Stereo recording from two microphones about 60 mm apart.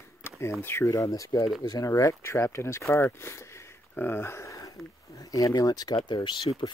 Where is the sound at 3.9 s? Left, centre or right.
Left.